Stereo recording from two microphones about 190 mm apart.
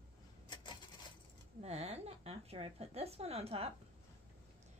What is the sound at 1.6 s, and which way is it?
A woman's voice, 35° right (ahead or behind).